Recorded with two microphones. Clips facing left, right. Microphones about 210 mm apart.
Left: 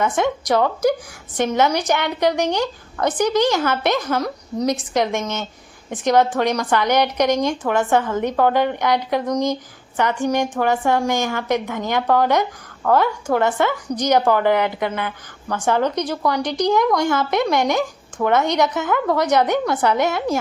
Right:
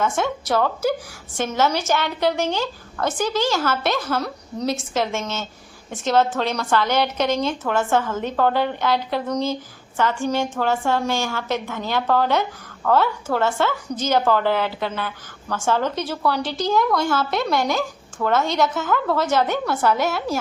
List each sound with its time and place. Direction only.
0.0 s a woman's voice: 15° left (ahead or behind)